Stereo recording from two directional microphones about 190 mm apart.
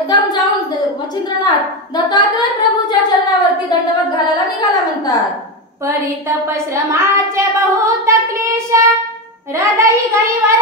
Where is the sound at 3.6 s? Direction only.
20° left (ahead or behind).